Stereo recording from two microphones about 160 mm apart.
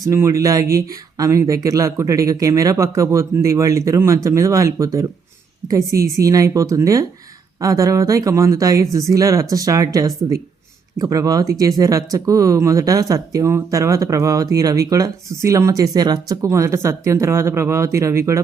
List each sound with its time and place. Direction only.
0.0 s speech: 20° right (ahead or behind)